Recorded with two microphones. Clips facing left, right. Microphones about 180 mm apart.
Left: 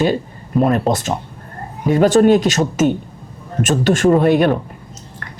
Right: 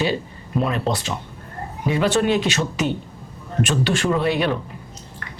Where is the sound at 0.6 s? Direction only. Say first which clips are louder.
Left 7 dB; 45° left (ahead or behind).